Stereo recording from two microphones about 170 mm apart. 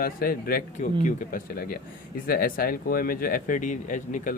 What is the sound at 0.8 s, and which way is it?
Speech, 50° left (ahead or behind).